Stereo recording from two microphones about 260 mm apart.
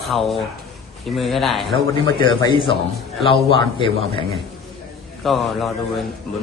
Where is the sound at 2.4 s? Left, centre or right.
Centre.